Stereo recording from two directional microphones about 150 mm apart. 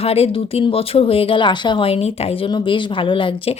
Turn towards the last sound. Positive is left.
turn(degrees=35)  # may be behind; listen again after turning